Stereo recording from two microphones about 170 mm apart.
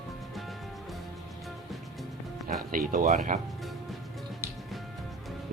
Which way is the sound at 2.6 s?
55° right (ahead or behind).